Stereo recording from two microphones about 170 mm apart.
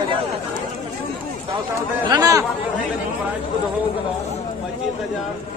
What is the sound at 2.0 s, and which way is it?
Speech, 20° right (ahead or behind).